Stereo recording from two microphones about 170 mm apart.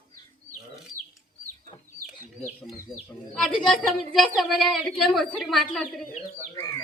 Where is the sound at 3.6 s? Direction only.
Centre (ahead or behind).